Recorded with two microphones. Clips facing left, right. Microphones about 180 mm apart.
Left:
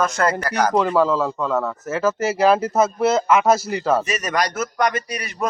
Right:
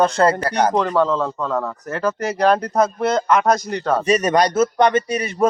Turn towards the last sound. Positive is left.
turn(degrees=-25)  # may be behind; listen again after turning